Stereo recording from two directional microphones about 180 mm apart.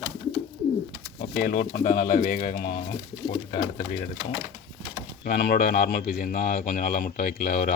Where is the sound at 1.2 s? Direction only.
60° left (ahead or behind).